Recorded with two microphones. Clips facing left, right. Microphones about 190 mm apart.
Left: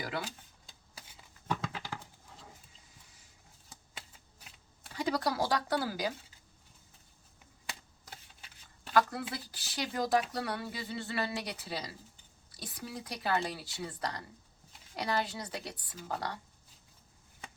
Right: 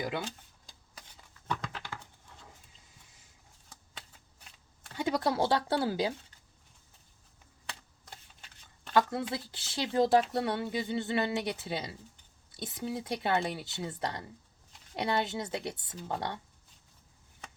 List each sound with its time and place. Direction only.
1.1 s a sound: 10° left (ahead or behind)
4.9 s speech: 25° right (ahead or behind)
8.9 s a woman's voice: 25° right (ahead or behind)